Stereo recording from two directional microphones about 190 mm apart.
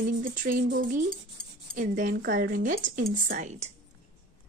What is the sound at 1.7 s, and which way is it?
Speech, 45° right (ahead or behind).